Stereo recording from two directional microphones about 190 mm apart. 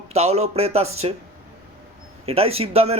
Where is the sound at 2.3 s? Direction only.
30° right (ahead or behind).